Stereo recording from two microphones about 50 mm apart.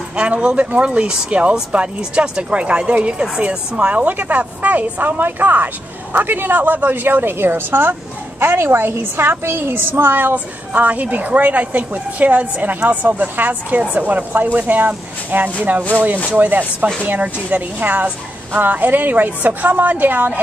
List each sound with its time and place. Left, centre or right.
0.1 s a woman's voice: right